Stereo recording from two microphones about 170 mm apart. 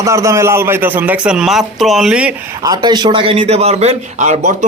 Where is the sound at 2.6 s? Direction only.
25° right (ahead or behind).